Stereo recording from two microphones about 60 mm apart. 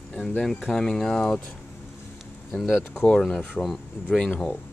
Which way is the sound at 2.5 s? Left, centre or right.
Centre.